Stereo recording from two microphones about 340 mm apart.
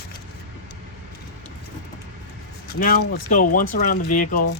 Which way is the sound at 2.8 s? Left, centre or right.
Left.